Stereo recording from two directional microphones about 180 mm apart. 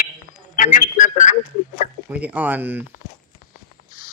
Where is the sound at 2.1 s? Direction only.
10° right (ahead or behind).